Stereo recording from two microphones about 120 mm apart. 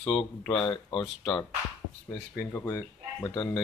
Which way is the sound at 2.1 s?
25° left (ahead or behind).